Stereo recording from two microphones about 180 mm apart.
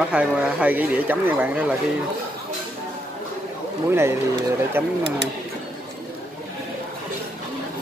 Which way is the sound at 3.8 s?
15° right (ahead or behind).